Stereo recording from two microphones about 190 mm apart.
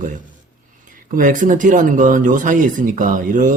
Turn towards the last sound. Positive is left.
turn(degrees=-45)  # may be behind; listen again after turning